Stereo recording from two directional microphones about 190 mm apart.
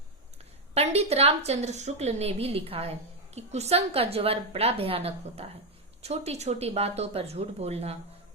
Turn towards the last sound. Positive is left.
turn(degrees=-35)  # may be behind; listen again after turning